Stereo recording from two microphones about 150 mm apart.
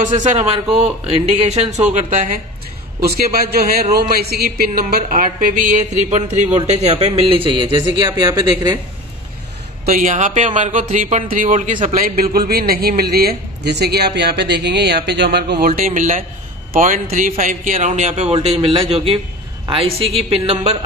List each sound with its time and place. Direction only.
0.0 s a man's voice: 50° right (ahead or behind)
2.0 s speech: 55° right (ahead or behind)
3.0 s a man's voice: 90° right
5.0 s a man's voice: 65° right (ahead or behind); by 8.7 s 25° right (ahead or behind)
9.9 s speech: 55° right (ahead or behind)
11.9 s a man's voice: 80° right
15.8 s a man's voice: 55° right (ahead or behind)